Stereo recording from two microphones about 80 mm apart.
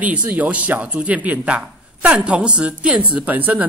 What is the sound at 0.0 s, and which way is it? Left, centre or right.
Speech, centre.